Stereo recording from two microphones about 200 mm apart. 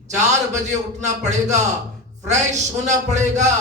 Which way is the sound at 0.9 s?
35° right (ahead or behind).